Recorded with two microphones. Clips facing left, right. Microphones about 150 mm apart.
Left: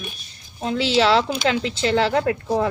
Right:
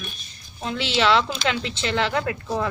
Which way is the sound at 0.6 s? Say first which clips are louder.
Left 5 dB; 30° left (ahead or behind).